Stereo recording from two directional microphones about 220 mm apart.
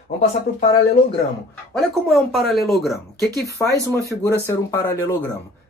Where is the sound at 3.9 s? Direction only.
10° left (ahead or behind).